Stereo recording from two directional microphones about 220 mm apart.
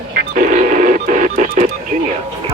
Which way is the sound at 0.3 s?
35° right (ahead or behind).